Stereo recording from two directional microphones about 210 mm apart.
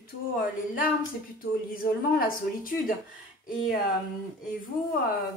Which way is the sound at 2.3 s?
40° left (ahead or behind).